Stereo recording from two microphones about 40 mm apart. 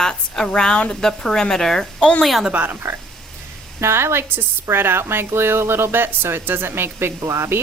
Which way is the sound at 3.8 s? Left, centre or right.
Right.